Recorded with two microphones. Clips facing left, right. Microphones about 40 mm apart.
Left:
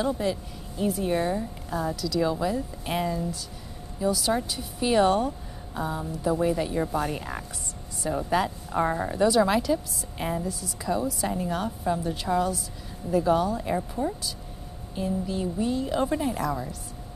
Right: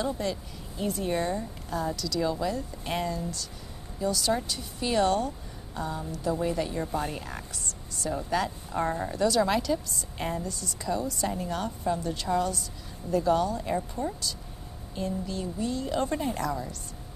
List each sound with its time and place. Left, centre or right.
0.0 s a woman's voice: centre